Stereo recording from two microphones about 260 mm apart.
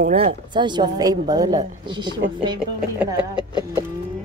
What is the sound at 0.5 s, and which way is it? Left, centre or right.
A woman's voice, centre.